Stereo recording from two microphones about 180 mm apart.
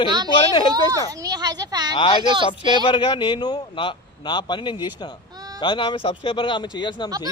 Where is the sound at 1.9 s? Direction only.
30° left (ahead or behind).